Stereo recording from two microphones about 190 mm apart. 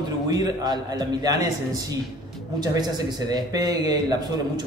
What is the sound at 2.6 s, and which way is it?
Speech, 20° right (ahead or behind).